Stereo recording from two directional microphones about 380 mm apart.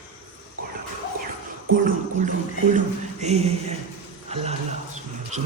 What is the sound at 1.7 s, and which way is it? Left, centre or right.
Speech, right.